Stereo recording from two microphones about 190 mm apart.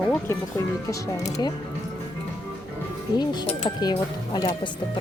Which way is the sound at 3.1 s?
20° left (ahead or behind).